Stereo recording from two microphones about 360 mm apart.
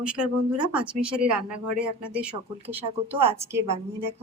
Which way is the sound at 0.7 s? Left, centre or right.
Centre.